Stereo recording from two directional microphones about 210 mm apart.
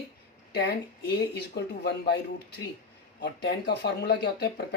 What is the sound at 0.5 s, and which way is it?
Speech, 50° left (ahead or behind).